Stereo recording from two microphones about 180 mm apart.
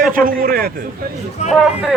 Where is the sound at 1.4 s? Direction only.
40° left (ahead or behind).